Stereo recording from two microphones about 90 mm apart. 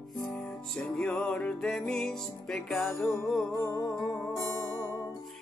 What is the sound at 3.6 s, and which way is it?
Music, 40° left (ahead or behind).